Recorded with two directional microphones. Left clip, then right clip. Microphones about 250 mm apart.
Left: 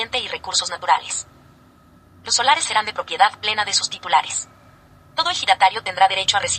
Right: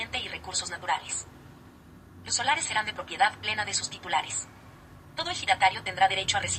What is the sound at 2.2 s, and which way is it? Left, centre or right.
Speech, left.